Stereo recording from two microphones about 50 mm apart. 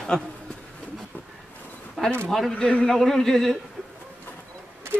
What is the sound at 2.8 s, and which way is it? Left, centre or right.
Speech, centre.